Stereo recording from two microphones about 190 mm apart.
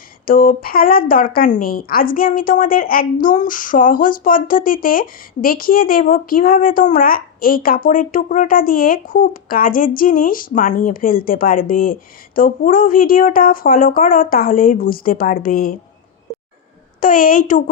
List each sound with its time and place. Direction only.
0.3 s a woman's voice: 50° left (ahead or behind)
17.0 s a woman's voice: 45° left (ahead or behind)